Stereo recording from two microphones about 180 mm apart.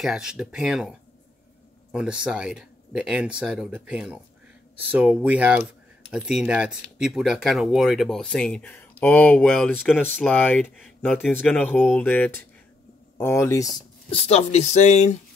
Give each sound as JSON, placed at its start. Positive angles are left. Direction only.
{"t": 0.0, "sound": "speech", "side_deg": -5}
{"t": 14.1, "sound": "speech", "side_deg": 35}